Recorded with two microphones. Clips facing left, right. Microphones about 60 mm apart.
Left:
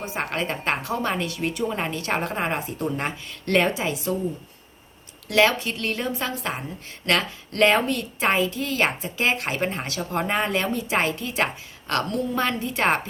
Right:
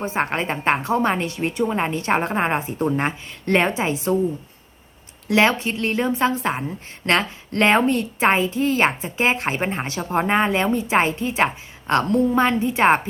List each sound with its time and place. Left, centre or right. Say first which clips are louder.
0.0 s a woman's voice: right 5 dB; right
5.3 s a woman's voice: right 2 dB; right